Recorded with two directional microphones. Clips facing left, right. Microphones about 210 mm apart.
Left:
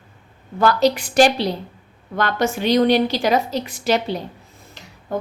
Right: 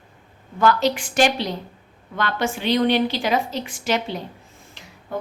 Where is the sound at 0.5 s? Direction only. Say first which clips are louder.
Left 2 dB; 35° left (ahead or behind).